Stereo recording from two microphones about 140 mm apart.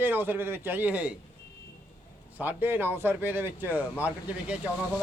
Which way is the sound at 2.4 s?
15° right (ahead or behind).